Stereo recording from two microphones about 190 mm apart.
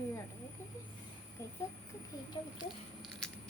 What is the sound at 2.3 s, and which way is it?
Speech, 25° left (ahead or behind).